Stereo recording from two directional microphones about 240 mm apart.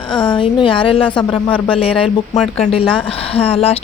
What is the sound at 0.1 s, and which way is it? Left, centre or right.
Speech, centre.